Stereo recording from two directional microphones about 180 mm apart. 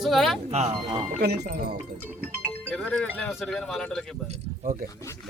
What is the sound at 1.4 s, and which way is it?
Speech, 60° right (ahead or behind).